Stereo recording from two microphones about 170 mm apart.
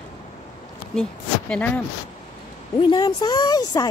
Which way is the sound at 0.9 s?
5° left (ahead or behind).